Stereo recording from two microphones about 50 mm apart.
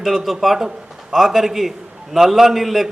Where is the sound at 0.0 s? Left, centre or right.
Centre.